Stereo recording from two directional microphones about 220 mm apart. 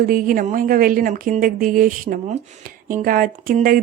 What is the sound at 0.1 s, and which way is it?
A woman's voice, 35° right (ahead or behind).